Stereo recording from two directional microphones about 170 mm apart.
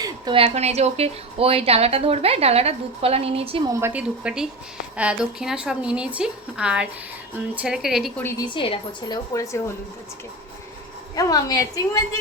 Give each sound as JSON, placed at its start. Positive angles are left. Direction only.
{"t": 0.0, "sound": "speech", "side_deg": -30}
{"t": 3.7, "sound": "speech", "side_deg": -15}
{"t": 8.2, "sound": "a woman's voice", "side_deg": 15}
{"t": 8.4, "sound": "a woman's voice", "side_deg": 30}
{"t": 11.1, "sound": "a woman's voice", "side_deg": 20}